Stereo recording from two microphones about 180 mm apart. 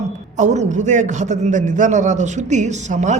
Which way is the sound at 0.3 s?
40° right (ahead or behind).